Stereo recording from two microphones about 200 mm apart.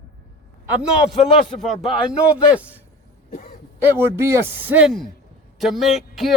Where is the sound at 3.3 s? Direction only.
45° left (ahead or behind).